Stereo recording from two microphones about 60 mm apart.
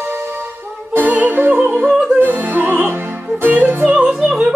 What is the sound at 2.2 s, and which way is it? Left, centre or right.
Opera, right.